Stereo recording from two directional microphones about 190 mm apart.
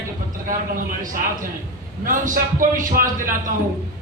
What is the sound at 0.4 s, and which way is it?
Speech, 50° right (ahead or behind).